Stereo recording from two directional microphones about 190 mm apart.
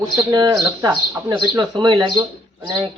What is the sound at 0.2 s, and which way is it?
Speech, 20° right (ahead or behind).